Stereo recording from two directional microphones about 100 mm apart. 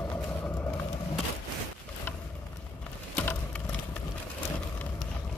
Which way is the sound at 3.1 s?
15° left (ahead or behind).